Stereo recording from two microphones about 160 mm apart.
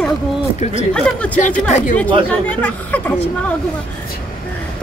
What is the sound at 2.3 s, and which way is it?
Speech, 5° left (ahead or behind).